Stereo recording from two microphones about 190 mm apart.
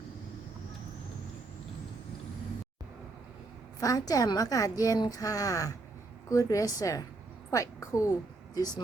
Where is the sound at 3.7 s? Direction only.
20° left (ahead or behind).